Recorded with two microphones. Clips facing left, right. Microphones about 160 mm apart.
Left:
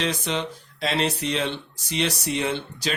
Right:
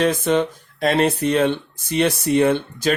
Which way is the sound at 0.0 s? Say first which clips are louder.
Right 9 dB; 50° right (ahead or behind).